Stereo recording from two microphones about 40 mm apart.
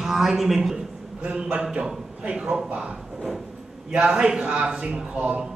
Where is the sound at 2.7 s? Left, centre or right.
Right.